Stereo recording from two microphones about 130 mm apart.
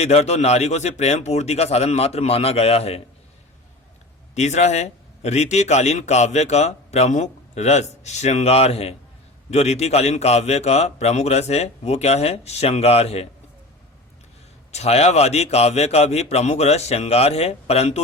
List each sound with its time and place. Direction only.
0.0 s a man's voice: 60° left (ahead or behind)
4.4 s a man's voice: 60° left (ahead or behind)
14.7 s a man's voice: 55° left (ahead or behind)